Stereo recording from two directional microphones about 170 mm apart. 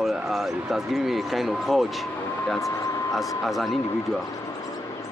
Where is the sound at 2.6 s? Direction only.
20° left (ahead or behind).